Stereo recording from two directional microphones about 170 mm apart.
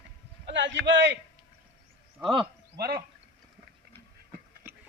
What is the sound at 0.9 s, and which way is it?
Speech, 90° right.